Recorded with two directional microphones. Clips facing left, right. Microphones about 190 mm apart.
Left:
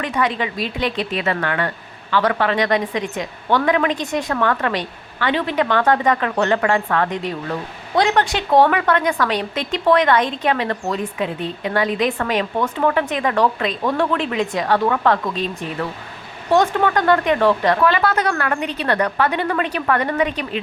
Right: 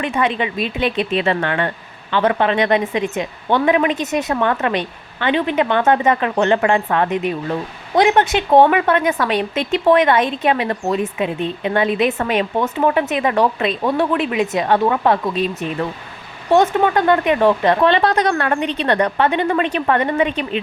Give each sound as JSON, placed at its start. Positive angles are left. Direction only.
{"t": 0.0, "sound": "a woman's voice", "side_deg": -25}